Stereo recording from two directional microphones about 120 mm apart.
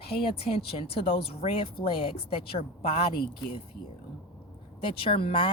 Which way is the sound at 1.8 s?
35° left (ahead or behind).